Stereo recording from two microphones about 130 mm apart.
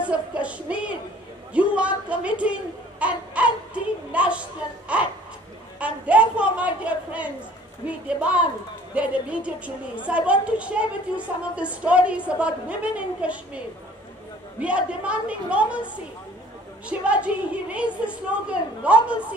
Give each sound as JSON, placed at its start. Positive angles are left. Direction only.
{"t": 0.0, "sound": "a woman's voice", "side_deg": -10}
{"t": 1.5, "sound": "a sound", "side_deg": -10}
{"t": 6.0, "sound": "a sound", "side_deg": -10}
{"t": 7.8, "sound": "a woman's voice", "side_deg": -10}
{"t": 14.6, "sound": "a woman's voice", "side_deg": -10}
{"t": 17.0, "sound": "a woman's voice", "side_deg": -10}